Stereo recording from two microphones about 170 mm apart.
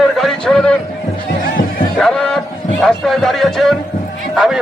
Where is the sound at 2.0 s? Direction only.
5° left (ahead or behind).